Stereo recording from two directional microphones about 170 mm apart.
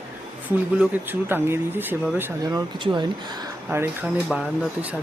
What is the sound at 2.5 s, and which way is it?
Speech, 25° right (ahead or behind).